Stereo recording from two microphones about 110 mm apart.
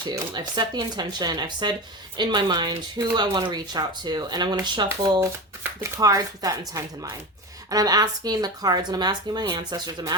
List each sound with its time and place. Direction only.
0.0 s speech: 40° right (ahead or behind)